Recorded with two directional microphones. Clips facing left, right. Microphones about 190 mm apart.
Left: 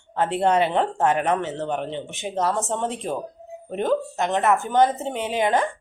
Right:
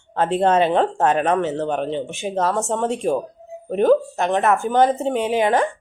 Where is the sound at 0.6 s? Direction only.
20° right (ahead or behind).